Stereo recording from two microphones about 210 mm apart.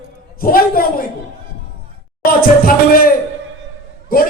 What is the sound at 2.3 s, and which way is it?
A man's voice, 45° left (ahead or behind).